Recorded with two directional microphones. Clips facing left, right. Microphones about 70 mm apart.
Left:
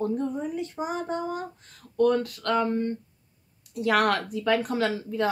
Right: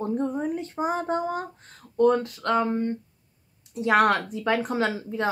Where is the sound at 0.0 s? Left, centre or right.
Right.